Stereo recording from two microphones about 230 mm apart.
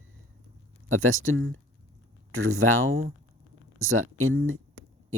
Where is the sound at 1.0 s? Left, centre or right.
Right.